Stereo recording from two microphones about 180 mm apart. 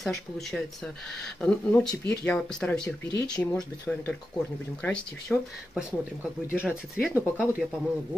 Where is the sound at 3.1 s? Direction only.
20° left (ahead or behind).